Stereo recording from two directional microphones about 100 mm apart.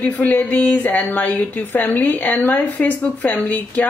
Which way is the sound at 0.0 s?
15° left (ahead or behind).